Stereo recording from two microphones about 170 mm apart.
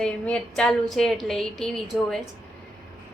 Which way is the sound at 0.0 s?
5° left (ahead or behind).